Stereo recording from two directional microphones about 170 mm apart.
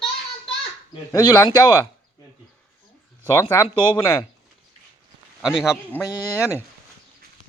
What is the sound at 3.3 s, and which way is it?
Speech, 15° left (ahead or behind).